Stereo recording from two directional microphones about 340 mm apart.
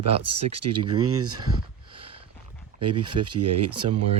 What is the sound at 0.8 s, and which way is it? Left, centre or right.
Speech, centre.